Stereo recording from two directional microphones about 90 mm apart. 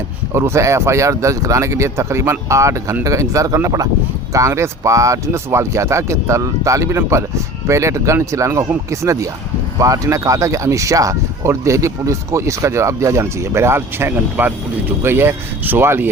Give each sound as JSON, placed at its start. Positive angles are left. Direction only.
{"t": 0.3, "sound": "speech", "side_deg": -30}